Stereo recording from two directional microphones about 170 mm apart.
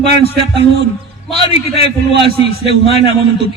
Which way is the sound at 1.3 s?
35° left (ahead or behind).